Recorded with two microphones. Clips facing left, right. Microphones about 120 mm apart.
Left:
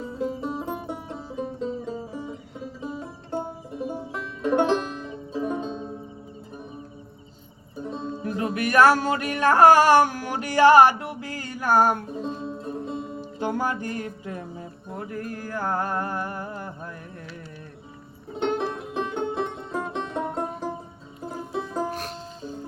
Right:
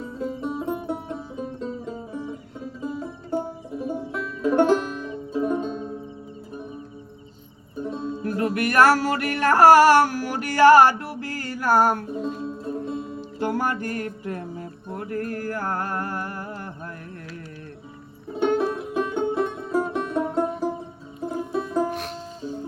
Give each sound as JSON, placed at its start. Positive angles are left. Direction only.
{"t": 0.0, "sound": "music", "side_deg": 0}
{"t": 7.8, "sound": "music", "side_deg": -5}
{"t": 8.2, "sound": "music", "side_deg": 20}
{"t": 12.1, "sound": "music", "side_deg": 0}
{"t": 13.4, "sound": "music", "side_deg": 20}
{"t": 14.0, "sound": "music", "side_deg": -55}
{"t": 15.1, "sound": "a sound", "side_deg": 15}
{"t": 18.3, "sound": "music", "side_deg": -10}